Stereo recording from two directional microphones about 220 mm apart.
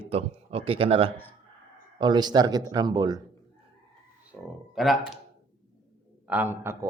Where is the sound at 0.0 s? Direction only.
25° right (ahead or behind).